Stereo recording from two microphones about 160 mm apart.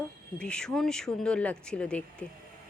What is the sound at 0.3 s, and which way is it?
Speech, 5° left (ahead or behind).